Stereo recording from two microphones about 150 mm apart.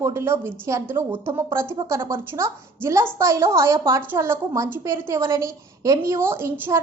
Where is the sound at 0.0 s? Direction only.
15° right (ahead or behind).